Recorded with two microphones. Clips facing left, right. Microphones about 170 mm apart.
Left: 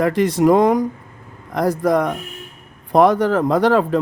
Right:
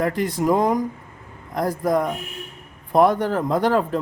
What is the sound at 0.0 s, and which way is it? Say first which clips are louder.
Speech: left 6 dB; 90° left.